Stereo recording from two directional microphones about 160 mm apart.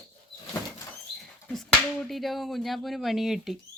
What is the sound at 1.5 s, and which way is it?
Speech, centre (ahead or behind).